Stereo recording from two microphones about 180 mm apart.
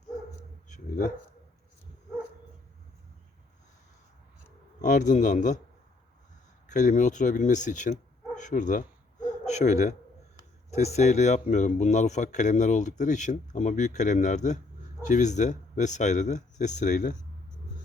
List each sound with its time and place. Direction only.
0.7 s a sound: 45° left (ahead or behind)
4.8 s speech: 45° left (ahead or behind)
6.7 s speech: 45° left (ahead or behind)
8.4 s dog: 45° left (ahead or behind)
10.7 s speech: 40° left (ahead or behind)